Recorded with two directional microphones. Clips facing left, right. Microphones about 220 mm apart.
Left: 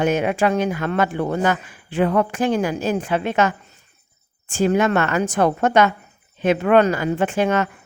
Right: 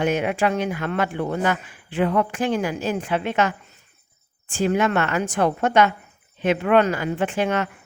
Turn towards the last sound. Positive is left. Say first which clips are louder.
# left 3 dB
turn(degrees=40)  # may be behind; listen again after turning